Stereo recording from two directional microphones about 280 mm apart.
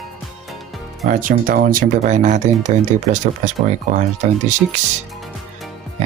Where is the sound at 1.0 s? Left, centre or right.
Right.